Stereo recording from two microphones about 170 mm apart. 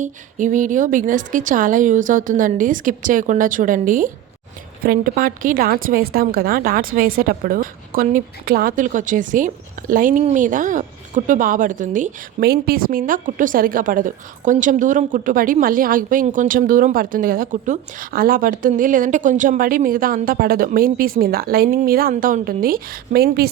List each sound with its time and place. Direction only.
0.0 s a woman's voice: 50° right (ahead or behind)
12.4 s a woman's voice: 65° right (ahead or behind)